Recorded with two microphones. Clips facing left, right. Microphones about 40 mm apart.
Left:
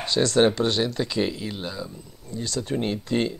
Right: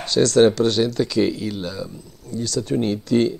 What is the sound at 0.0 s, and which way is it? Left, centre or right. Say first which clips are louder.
Speech: right 5 dB; left.